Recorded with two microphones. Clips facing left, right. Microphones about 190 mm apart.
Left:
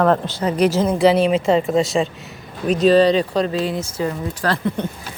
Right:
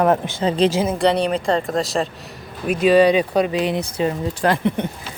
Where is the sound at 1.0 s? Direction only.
Centre (ahead or behind).